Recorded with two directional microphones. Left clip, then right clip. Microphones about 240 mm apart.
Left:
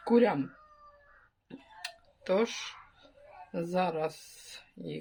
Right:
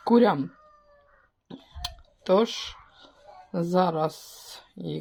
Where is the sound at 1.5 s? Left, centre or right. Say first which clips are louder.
Right 6 dB; centre.